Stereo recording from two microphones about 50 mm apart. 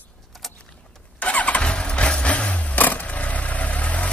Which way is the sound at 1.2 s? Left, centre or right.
Left.